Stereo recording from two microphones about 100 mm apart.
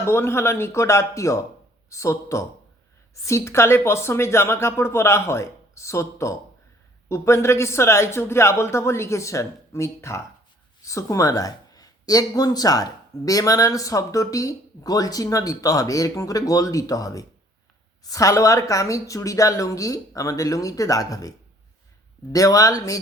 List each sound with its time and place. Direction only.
0.0 s speech: 25° left (ahead or behind)